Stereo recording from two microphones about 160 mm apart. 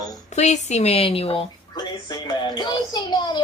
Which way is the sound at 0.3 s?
45° left (ahead or behind).